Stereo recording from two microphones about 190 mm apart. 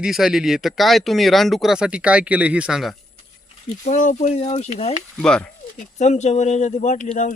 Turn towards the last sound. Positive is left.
turn(degrees=40)  # may be behind; listen again after turning